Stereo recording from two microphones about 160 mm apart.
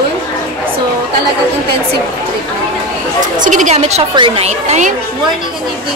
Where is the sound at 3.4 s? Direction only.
50° right (ahead or behind).